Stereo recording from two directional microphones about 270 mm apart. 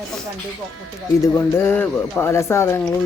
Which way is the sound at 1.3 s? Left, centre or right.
Centre.